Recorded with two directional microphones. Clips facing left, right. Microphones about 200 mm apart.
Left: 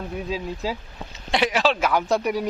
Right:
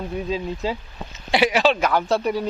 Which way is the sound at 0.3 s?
5° left (ahead or behind).